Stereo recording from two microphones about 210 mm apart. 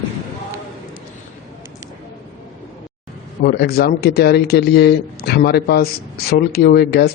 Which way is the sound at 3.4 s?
50° left (ahead or behind).